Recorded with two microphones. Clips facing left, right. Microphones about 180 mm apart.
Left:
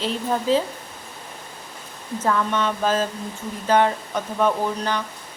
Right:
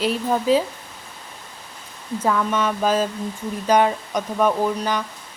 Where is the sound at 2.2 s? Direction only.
5° right (ahead or behind).